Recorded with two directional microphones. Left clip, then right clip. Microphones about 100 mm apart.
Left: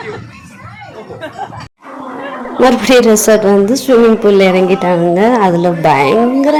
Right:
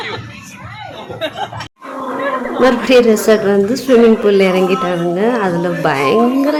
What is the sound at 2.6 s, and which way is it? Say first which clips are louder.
Speech: left 3 dB; 40° left (ahead or behind).